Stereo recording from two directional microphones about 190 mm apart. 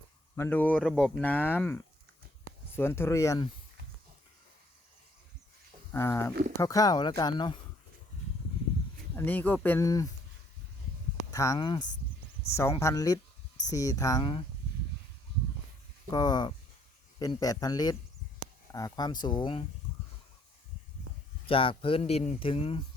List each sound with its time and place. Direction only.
0.3 s speech: 10° left (ahead or behind)
5.9 s speech: 15° left (ahead or behind)
9.1 s speech: 10° left (ahead or behind)
11.3 s speech: 15° left (ahead or behind)
16.0 s speech: 20° left (ahead or behind)
21.4 s speech: 30° left (ahead or behind)